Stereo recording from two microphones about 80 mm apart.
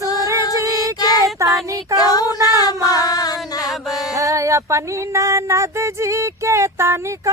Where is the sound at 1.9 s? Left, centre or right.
Left.